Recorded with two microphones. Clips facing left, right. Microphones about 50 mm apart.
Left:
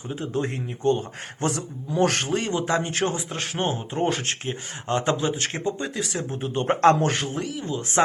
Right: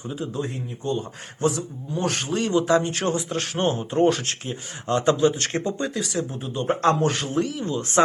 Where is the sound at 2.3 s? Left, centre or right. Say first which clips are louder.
Right 4 dB; left.